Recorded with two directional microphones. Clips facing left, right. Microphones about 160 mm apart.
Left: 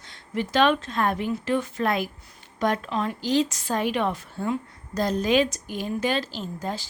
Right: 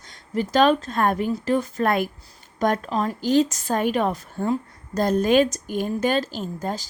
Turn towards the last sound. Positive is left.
turn(degrees=-45)  # may be behind; listen again after turning